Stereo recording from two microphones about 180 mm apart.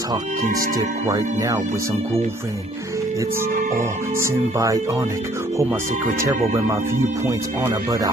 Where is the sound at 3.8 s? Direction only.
15° right (ahead or behind).